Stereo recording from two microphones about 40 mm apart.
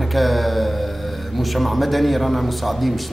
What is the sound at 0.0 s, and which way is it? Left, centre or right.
Speech, centre.